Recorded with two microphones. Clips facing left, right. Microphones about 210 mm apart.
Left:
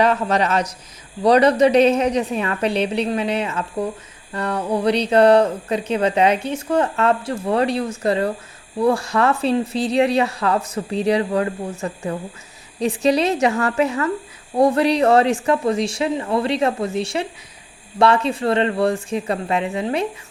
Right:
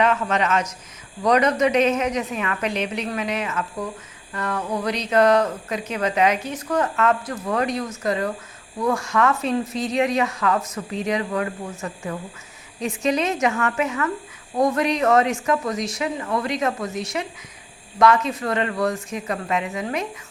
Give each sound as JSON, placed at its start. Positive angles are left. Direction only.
{"t": 0.0, "sound": "speech", "side_deg": 35}